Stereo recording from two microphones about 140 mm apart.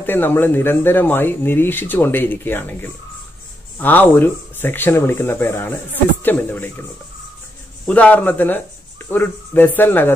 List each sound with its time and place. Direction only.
0.0 s speech: 15° left (ahead or behind)